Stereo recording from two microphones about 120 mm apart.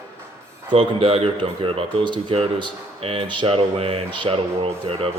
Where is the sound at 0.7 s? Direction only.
55° right (ahead or behind).